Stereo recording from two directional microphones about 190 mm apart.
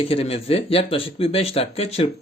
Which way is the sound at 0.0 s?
30° left (ahead or behind).